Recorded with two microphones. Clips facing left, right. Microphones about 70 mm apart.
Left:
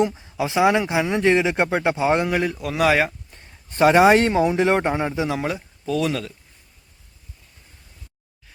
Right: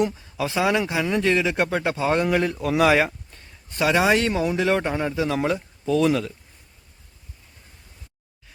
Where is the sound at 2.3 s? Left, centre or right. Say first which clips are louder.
Right 1 dB; centre.